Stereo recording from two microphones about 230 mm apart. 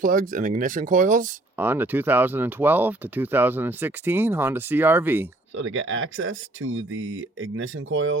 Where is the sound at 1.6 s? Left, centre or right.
Centre.